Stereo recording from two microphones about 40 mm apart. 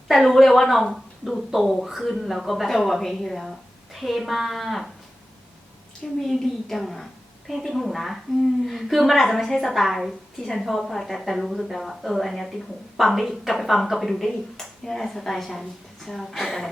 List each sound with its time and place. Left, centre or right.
0.1 s speech: centre
6.2 s a woman's voice: centre
10.3 s a woman's voice: centre